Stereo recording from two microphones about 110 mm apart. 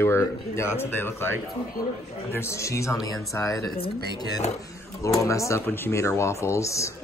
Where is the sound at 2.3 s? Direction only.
25° left (ahead or behind).